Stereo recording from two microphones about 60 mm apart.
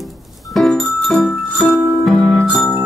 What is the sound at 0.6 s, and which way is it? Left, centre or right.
Music, centre.